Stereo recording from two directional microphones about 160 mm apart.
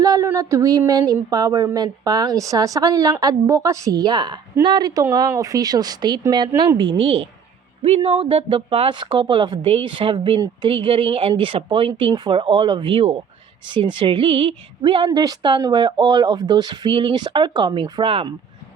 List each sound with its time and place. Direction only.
0.0 s speech: 20° right (ahead or behind)